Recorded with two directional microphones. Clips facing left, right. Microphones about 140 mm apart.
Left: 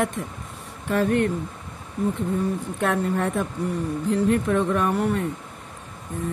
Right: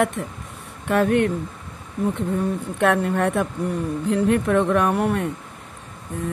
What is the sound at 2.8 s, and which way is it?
Speech, 70° right (ahead or behind).